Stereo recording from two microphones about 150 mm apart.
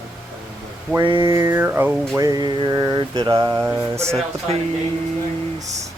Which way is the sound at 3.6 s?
15° right (ahead or behind).